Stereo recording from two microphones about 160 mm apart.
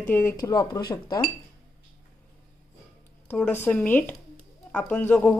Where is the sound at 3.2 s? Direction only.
10° left (ahead or behind).